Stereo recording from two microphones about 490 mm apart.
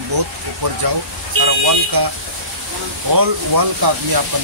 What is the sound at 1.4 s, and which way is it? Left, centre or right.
Speech, right.